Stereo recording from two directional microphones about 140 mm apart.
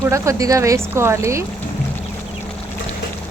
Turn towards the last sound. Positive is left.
turn(degrees=-20)  # may be behind; listen again after turning